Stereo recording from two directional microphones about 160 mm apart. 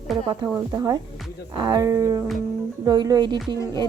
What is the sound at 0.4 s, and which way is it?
Speech, 20° right (ahead or behind).